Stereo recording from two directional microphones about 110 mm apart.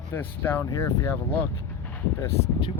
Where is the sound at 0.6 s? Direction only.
30° left (ahead or behind).